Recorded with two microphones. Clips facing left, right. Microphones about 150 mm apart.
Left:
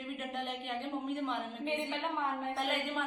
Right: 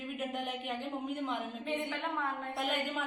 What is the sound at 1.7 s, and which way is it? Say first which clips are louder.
Speech: left 1 dB; 20° left (ahead or behind).